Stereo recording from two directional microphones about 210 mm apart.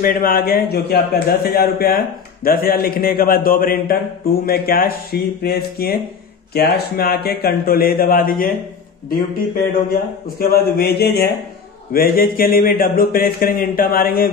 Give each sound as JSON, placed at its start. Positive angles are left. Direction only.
{"t": 0.0, "sound": "speech", "side_deg": 40}
{"t": 10.4, "sound": "speech", "side_deg": 45}